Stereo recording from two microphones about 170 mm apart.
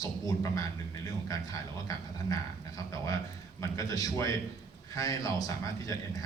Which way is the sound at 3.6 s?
20° left (ahead or behind).